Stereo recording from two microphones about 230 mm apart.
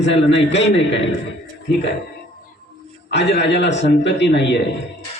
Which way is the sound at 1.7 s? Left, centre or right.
Left.